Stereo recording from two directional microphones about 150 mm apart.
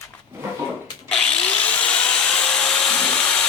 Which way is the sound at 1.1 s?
5° left (ahead or behind).